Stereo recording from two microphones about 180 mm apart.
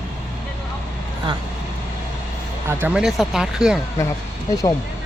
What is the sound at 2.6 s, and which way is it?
Speech, 10° right (ahead or behind).